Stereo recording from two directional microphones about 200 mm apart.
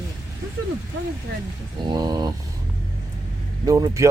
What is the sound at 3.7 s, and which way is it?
Speech, 15° right (ahead or behind).